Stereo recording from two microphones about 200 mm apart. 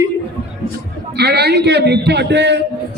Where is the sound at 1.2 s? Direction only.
55° right (ahead or behind).